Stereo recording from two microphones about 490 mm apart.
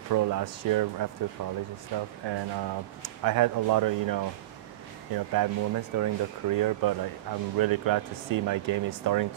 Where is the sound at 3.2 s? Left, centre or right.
Right.